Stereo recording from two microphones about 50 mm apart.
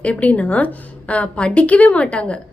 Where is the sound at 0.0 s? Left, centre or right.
Left.